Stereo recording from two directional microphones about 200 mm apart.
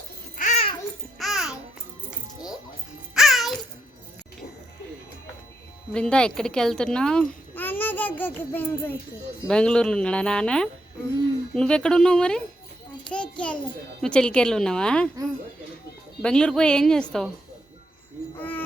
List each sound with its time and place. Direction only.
0.3 s babbling: 35° left (ahead or behind)
1.2 s babbling: centre (ahead or behind)
2.0 s music: 5° right (ahead or behind)
5.9 s a child's voice: 5° left (ahead or behind)
16.2 s a child's voice: 5° left (ahead or behind)
18.3 s a sound: 10° left (ahead or behind)